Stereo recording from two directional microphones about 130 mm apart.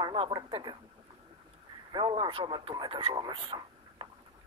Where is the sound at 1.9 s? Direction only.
35° right (ahead or behind).